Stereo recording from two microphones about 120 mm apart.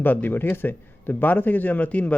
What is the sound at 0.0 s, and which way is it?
A man's voice, 15° left (ahead or behind).